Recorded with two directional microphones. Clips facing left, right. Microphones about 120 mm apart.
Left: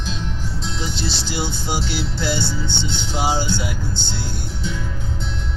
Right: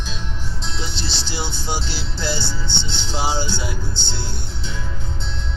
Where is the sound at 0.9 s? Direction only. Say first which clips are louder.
Left 3 dB; 25° right (ahead or behind).